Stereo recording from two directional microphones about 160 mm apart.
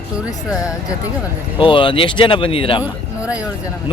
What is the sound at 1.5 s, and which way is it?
Speech, 30° left (ahead or behind).